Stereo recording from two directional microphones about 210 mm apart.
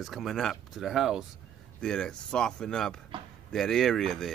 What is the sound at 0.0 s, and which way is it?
Speech, centre (ahead or behind).